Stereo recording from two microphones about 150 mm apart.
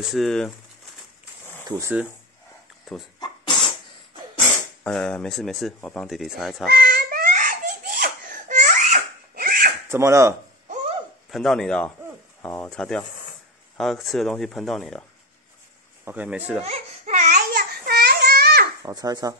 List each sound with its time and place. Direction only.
0.0 s speech: centre (ahead or behind)
1.7 s speech: 20° right (ahead or behind)
3.2 s sneeze: 35° left (ahead or behind)
4.8 s speech: 5° left (ahead or behind)
6.7 s baby laughter: 90° right; by 9.7 s 75° right (ahead or behind)
9.8 s speech: 15° right (ahead or behind)
11.2 s speech: centre (ahead or behind)
12.4 s a sound: 15° left (ahead or behind)
12.6 s speech: 5° left (ahead or behind)
16.1 s speech: 10° right (ahead or behind)
16.6 s baby cry: 50° right (ahead or behind)
17.6 s baby cry: 90° right
18.8 s a child's voice: 25° right (ahead or behind)